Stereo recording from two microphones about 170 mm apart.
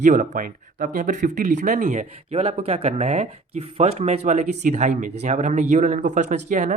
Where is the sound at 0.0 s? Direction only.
50° right (ahead or behind).